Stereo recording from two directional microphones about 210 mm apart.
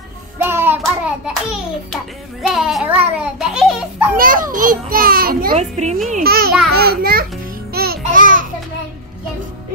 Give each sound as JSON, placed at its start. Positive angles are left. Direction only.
{"t": 0.4, "sound": "hands", "side_deg": -10}
{"t": 2.4, "sound": "a child's voice", "side_deg": 0}
{"t": 4.2, "sound": "a child's voice", "side_deg": -40}
{"t": 5.5, "sound": "speech", "side_deg": -30}
{"t": 6.2, "sound": "babbling", "side_deg": -45}
{"t": 6.7, "sound": "a sound", "side_deg": -50}
{"t": 7.7, "sound": "music", "side_deg": -45}